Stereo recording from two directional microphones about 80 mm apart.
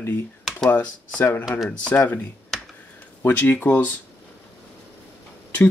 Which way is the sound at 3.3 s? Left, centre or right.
Left.